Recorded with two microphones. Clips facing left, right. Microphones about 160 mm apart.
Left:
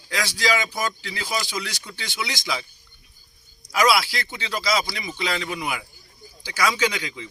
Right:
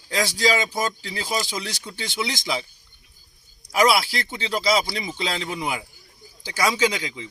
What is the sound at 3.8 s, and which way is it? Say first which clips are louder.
Speech: right 1 dB; 25° right (ahead or behind).